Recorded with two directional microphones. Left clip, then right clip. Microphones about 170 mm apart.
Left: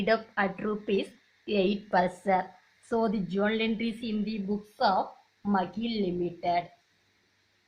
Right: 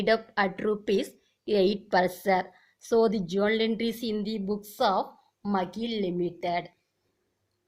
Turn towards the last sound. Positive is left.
turn(degrees=-45)  # may be behind; listen again after turning